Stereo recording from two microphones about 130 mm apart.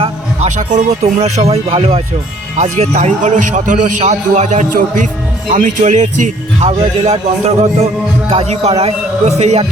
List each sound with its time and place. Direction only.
0.4 s speech: 65° right (ahead or behind)
2.6 s a man's voice: 60° right (ahead or behind)